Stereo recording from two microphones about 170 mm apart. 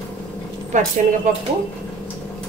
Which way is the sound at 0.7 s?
45° right (ahead or behind).